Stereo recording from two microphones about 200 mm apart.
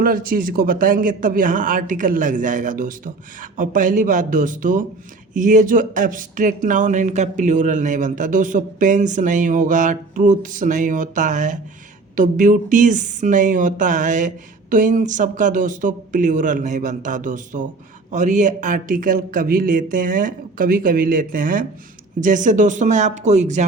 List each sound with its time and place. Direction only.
0.0 s a man's voice: 45° right (ahead or behind)